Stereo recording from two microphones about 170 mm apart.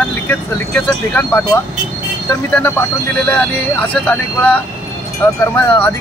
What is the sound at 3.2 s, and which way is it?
Speech, 10° left (ahead or behind).